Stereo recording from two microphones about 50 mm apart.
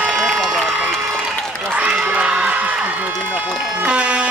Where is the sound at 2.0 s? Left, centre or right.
Right.